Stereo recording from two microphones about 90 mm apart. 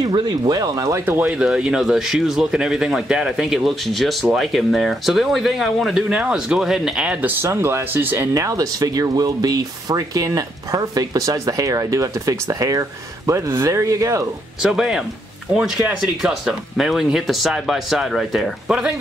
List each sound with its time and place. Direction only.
0.1 s speech: 50° right (ahead or behind)
1.0 s speech: 25° right (ahead or behind)
1.3 s speech: 10° right (ahead or behind)
8.4 s speech: 40° right (ahead or behind)
14.6 s speech: 5° right (ahead or behind)
16.2 s speech: 5° right (ahead or behind)